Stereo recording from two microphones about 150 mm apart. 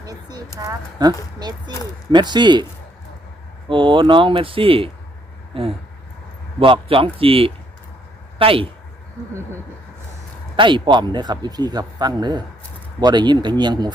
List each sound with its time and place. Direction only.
0.0 s a sound: 25° right (ahead or behind)
0.9 s speech: 25° right (ahead or behind)
3.7 s speech: 35° right (ahead or behind)
10.6 s speech: 30° right (ahead or behind)